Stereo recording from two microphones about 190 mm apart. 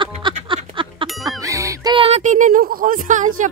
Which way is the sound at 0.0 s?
25° right (ahead or behind).